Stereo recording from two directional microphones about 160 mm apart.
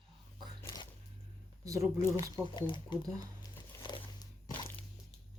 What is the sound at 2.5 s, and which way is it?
Speech, 30° left (ahead or behind).